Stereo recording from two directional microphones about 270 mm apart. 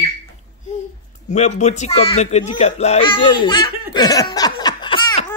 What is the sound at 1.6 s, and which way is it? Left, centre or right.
Speech, left.